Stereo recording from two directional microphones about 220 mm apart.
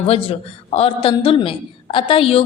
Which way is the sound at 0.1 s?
25° left (ahead or behind).